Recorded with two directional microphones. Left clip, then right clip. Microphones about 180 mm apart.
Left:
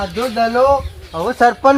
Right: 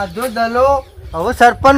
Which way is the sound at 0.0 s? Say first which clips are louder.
Even; 5° right (ahead or behind).